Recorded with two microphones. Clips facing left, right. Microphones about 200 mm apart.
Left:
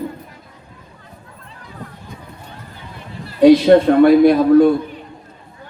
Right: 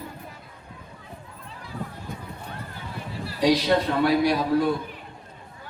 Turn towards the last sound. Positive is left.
turn(degrees=55)  # may be behind; listen again after turning